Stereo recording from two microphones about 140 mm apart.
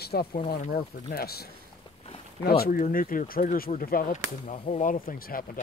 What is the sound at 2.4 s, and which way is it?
Speech, 90° left.